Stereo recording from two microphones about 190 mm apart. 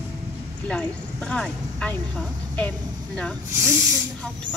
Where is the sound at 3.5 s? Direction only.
15° right (ahead or behind).